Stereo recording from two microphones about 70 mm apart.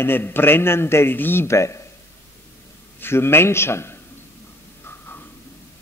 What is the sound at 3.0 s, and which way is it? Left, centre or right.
A man's voice, left.